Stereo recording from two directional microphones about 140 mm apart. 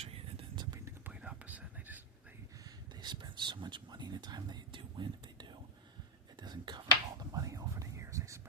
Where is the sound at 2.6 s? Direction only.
30° right (ahead or behind).